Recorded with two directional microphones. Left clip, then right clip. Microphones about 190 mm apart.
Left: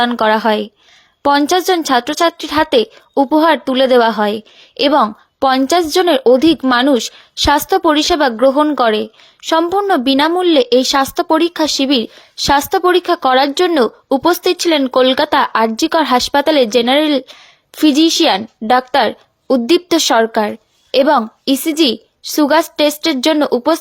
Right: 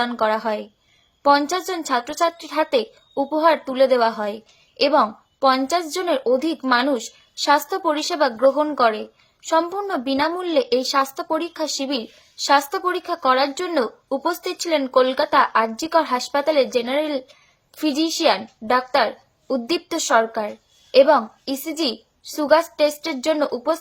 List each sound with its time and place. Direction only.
0.0 s a woman's voice: 45° left (ahead or behind)